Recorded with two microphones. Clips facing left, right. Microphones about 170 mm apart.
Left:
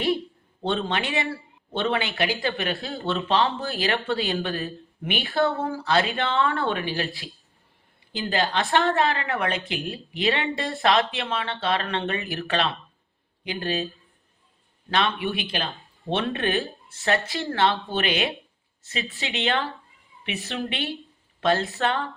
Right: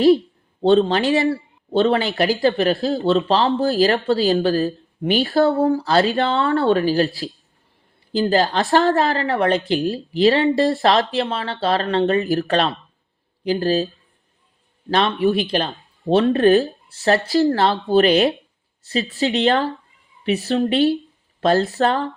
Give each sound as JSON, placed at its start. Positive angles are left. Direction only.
{"t": 0.6, "sound": "speech", "side_deg": -35}